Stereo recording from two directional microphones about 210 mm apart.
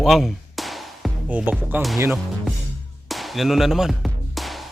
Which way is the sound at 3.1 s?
Centre (ahead or behind).